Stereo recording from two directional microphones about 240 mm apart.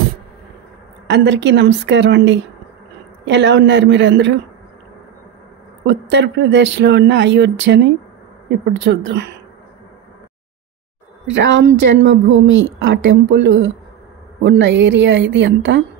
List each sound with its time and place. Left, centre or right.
1.0 s speech: right
5.9 s speech: right
11.2 s speech: right